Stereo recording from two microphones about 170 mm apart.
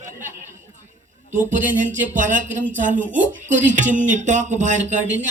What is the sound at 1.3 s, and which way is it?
Speech, 50° right (ahead or behind).